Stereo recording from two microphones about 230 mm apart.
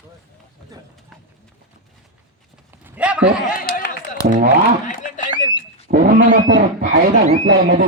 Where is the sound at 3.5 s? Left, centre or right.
Left.